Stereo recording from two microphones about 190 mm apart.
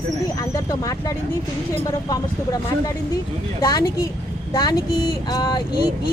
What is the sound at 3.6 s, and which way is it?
Speech, 20° left (ahead or behind).